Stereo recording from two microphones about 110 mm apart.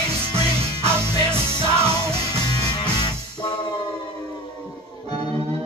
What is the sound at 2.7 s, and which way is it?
Music, 45° left (ahead or behind).